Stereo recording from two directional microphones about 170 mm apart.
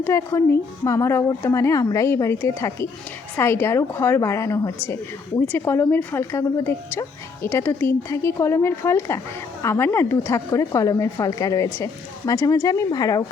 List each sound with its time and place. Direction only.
0.0 s a woman's voice: 15° left (ahead or behind)